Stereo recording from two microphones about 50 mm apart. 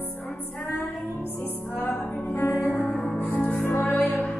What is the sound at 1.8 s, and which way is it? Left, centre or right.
Music, left.